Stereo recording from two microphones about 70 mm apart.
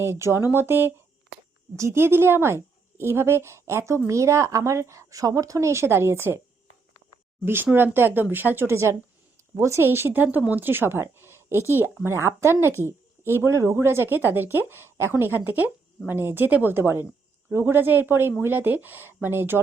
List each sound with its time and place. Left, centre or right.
0.0 s speech: right
1.7 s speech: right
7.4 s speech: right